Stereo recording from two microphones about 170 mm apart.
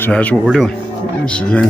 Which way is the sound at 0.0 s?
10° left (ahead or behind).